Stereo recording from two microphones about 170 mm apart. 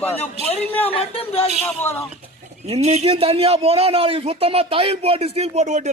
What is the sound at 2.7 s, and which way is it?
A man's voice, 40° right (ahead or behind).